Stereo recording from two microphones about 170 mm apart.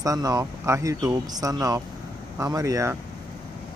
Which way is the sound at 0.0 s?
20° right (ahead or behind).